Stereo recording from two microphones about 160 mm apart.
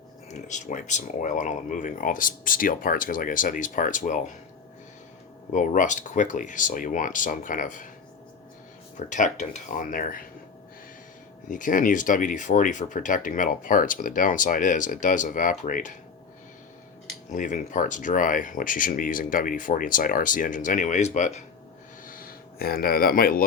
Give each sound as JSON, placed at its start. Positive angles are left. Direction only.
{"t": 0.3, "sound": "speech", "side_deg": 50}
{"t": 5.5, "sound": "speech", "side_deg": 50}
{"t": 9.0, "sound": "speech", "side_deg": 50}
{"t": 11.4, "sound": "speech", "side_deg": 55}
{"t": 17.3, "sound": "speech", "side_deg": 50}
{"t": 22.0, "sound": "a sound", "side_deg": 65}